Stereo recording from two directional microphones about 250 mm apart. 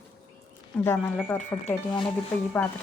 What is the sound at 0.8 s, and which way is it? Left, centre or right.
Speech, centre.